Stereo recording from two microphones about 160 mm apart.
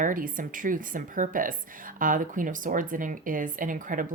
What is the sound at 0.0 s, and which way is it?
Speech, 60° right (ahead or behind).